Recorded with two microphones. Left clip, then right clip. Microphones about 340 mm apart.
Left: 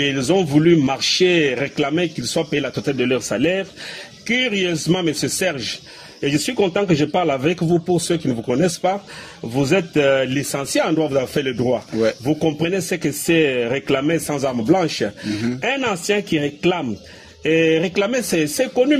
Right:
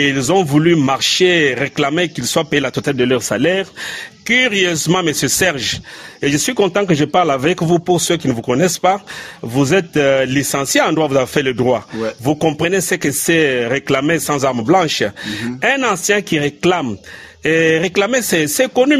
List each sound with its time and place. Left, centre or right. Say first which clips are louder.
0.0 s a man's voice: right 4 dB; right